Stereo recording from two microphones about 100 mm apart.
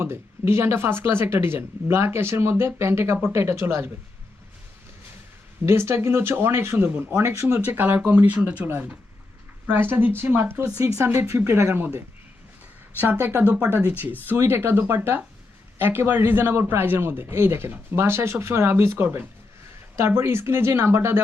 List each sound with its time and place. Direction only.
0.0 s a man's voice: 25° right (ahead or behind)
5.6 s a man's voice: 25° right (ahead or behind)
13.2 s a man's voice: 15° right (ahead or behind)